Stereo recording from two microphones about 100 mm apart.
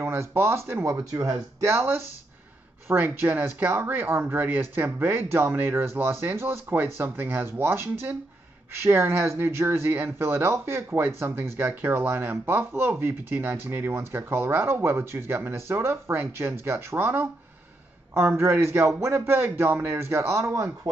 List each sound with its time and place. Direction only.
0.0 s speech: 25° right (ahead or behind)